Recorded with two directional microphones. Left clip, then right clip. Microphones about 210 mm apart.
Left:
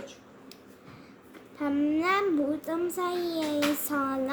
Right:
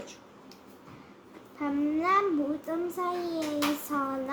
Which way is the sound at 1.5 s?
30° left (ahead or behind).